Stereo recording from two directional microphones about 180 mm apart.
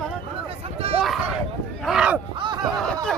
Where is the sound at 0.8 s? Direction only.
30° right (ahead or behind).